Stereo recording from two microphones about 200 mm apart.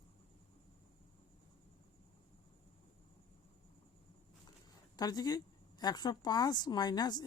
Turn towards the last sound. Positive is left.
turn(degrees=20)  # may be behind; listen again after turning